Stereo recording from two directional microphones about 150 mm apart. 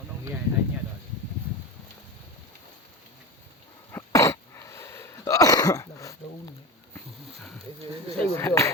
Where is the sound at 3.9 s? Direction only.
20° left (ahead or behind).